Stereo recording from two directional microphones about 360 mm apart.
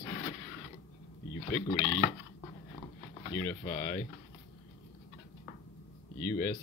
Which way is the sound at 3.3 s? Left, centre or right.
Centre.